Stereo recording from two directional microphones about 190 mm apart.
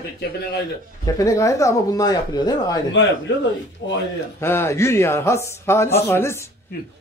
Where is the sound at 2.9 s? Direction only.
70° left (ahead or behind).